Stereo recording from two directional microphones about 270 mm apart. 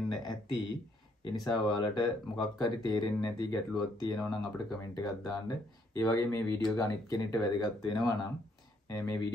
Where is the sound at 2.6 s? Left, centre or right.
Centre.